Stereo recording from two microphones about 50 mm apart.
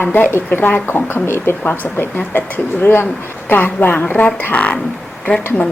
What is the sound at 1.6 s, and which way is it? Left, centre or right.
A woman's voice, left.